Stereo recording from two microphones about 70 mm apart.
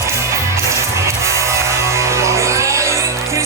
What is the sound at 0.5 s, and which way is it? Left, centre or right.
Music, right.